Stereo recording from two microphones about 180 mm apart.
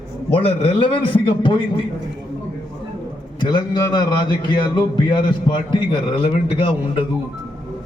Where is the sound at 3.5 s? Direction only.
25° left (ahead or behind).